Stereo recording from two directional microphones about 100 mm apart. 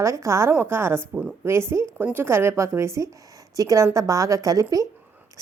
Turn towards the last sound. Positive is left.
turn(degrees=-35)  # may be behind; listen again after turning